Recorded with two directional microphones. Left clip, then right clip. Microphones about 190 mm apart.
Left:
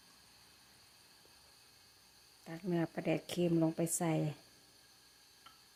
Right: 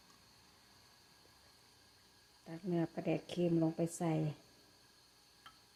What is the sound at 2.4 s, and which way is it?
Speech, 10° left (ahead or behind).